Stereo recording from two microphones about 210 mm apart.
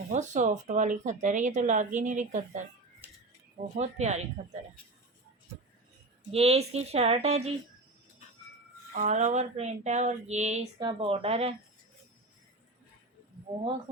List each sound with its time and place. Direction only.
0.1 s speech: 35° right (ahead or behind)
3.0 s music: 10° right (ahead or behind)
3.8 s speech: 30° right (ahead or behind)
6.3 s speech: 30° right (ahead or behind)
9.0 s speech: 35° right (ahead or behind)